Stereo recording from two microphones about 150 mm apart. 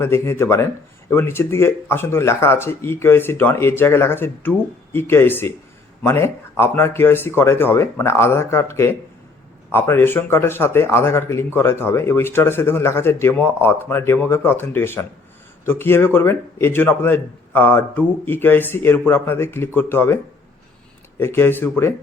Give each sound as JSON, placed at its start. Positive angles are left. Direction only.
{"t": 0.0, "sound": "speech", "side_deg": 15}
{"t": 21.2, "sound": "speech", "side_deg": 15}